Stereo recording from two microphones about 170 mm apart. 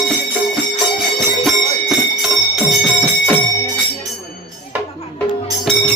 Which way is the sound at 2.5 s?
Centre (ahead or behind).